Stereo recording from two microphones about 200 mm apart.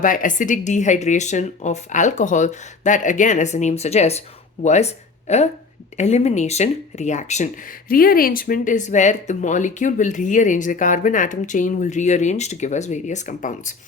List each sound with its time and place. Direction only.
0.0 s speech: 40° left (ahead or behind)